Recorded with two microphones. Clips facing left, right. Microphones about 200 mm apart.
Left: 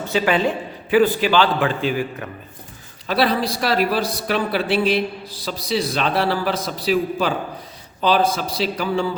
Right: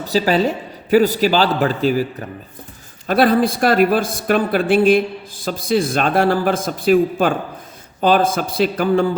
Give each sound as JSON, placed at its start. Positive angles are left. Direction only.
{"t": 0.0, "sound": "a man's voice", "side_deg": -35}
{"t": 3.1, "sound": "speech", "side_deg": -50}